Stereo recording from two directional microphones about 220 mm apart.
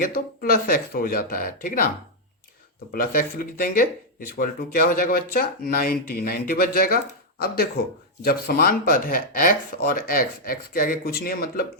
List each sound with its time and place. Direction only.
0.0 s speech: 40° left (ahead or behind)
2.9 s speech: 40° left (ahead or behind)